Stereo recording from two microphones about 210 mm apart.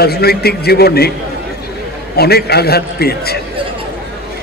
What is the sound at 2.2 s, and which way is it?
A man's voice, 50° left (ahead or behind).